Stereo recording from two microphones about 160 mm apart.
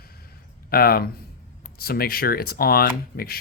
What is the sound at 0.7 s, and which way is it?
Speech, 70° left (ahead or behind).